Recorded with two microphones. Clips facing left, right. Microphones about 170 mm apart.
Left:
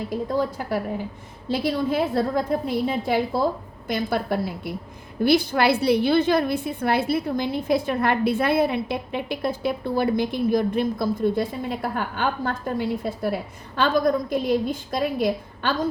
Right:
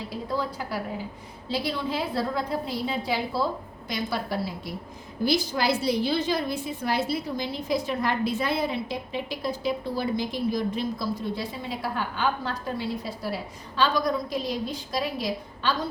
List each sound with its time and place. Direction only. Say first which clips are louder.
0.1 s a woman's voice: left 5 dB; 50° left (ahead or behind)